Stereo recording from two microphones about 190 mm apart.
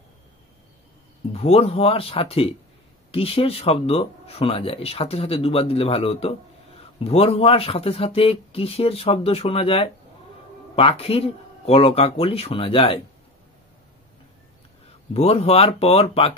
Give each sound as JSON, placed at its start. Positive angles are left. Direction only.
{"t": 1.3, "sound": "speech", "side_deg": 30}
{"t": 15.1, "sound": "speech", "side_deg": 30}